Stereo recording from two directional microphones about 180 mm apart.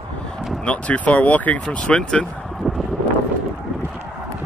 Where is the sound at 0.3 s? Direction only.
Centre (ahead or behind).